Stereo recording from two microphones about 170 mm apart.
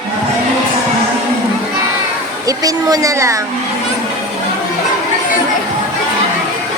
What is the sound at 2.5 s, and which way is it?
Speech, 20° right (ahead or behind).